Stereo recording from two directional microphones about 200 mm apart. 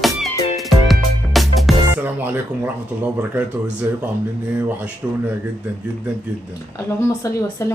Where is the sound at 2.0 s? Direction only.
10° right (ahead or behind).